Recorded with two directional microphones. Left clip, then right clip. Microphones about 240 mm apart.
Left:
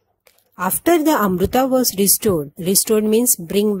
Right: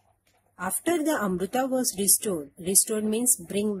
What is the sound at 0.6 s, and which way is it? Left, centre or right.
A woman's voice, left.